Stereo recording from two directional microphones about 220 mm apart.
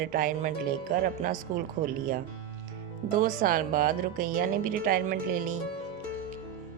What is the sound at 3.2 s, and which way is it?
Speech, 40° right (ahead or behind).